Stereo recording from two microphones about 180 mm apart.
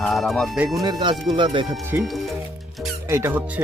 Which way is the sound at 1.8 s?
10° right (ahead or behind).